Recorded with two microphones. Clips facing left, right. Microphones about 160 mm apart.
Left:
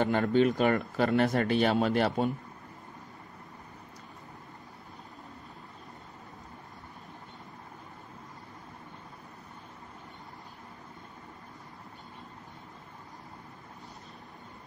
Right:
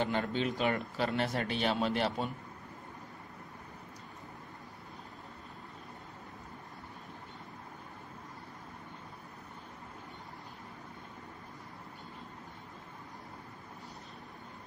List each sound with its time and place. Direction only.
0.0 s speech: 50° left (ahead or behind)